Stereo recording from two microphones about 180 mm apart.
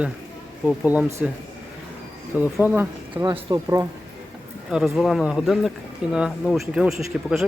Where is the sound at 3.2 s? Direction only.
20° right (ahead or behind).